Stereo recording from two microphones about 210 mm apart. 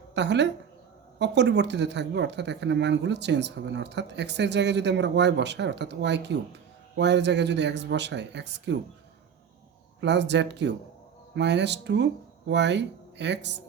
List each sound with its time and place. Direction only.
0.1 s a woman's voice: 55° right (ahead or behind)
10.0 s speech: 55° right (ahead or behind)